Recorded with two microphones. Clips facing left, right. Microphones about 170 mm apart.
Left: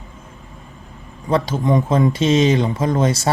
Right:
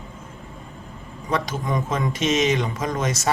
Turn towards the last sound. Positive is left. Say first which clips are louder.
# left 6 dB
turn(degrees=30)  # may be behind; listen again after turning